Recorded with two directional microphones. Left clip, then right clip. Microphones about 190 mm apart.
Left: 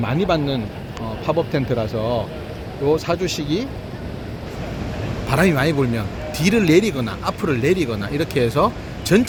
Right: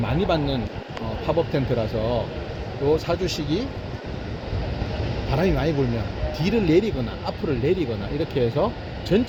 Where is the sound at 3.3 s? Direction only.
50° left (ahead or behind).